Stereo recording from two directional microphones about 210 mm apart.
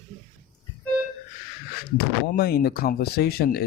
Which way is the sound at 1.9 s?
45° left (ahead or behind).